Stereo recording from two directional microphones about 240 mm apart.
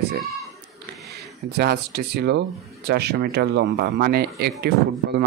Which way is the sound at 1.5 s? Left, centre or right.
Right.